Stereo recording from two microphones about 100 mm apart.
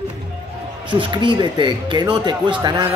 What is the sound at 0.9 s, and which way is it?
A man's voice, 50° right (ahead or behind).